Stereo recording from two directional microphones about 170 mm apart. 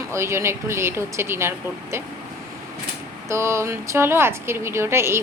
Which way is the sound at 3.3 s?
15° right (ahead or behind).